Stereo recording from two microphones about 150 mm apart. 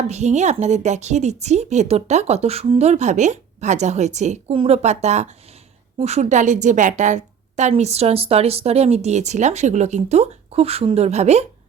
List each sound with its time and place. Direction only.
0.1 s a woman's voice: 50° right (ahead or behind)